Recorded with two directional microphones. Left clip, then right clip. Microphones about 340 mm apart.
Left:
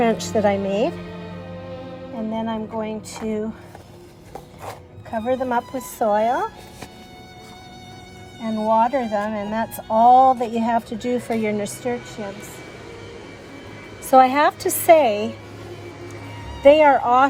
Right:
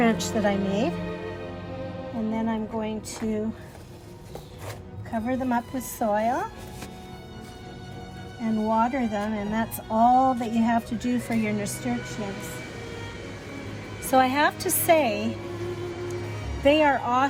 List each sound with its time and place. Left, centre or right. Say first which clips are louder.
0.0 s speech: left 5 dB; centre
2.3 s music: left 4 dB; left
5.1 s speech: left 6 dB; left
8.4 s speech: left 6 dB; left
14.1 s speech: left 7 dB; left
16.6 s speech: left 8 dB; left